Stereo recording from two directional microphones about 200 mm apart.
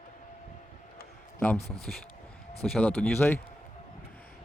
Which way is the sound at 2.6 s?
5° left (ahead or behind).